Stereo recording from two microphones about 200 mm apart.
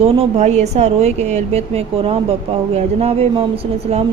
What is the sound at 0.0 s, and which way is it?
A woman's voice, 30° right (ahead or behind).